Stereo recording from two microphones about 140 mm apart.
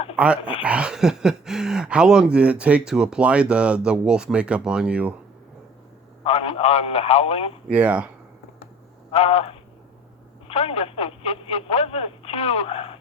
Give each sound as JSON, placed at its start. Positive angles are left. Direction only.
{"t": 0.2, "sound": "speech", "side_deg": -10}
{"t": 6.2, "sound": "a sound", "side_deg": 45}
{"t": 7.7, "sound": "speech", "side_deg": -10}
{"t": 9.1, "sound": "a man's voice", "side_deg": 45}
{"t": 10.5, "sound": "telephone", "side_deg": 45}